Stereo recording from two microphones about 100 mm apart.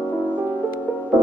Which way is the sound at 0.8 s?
15° left (ahead or behind).